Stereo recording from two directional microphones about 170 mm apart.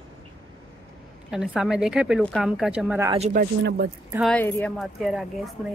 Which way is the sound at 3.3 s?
65° right (ahead or behind).